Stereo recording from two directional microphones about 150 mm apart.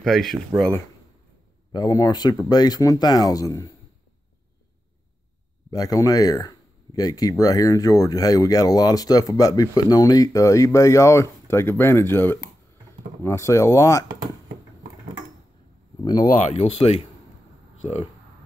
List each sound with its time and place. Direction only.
0.0 s speech: centre (ahead or behind)
1.7 s speech: 25° left (ahead or behind)
5.7 s speech: 25° left (ahead or behind)
16.0 s speech: 25° left (ahead or behind)
16.5 s speech: 45° left (ahead or behind)